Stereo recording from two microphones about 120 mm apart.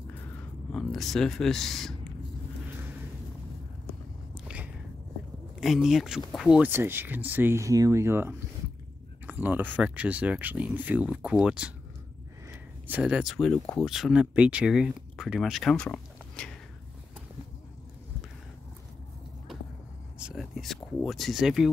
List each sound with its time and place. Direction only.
0.7 s speech: 5° left (ahead or behind)
5.6 s speech: 5° right (ahead or behind)
6.6 s speech: 20° right (ahead or behind)
12.8 s speech: 10° right (ahead or behind); by 16.5 s 10° left (ahead or behind)
20.2 s a sound: 5° right (ahead or behind)